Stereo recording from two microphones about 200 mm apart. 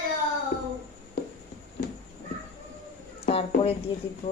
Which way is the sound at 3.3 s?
30° left (ahead or behind).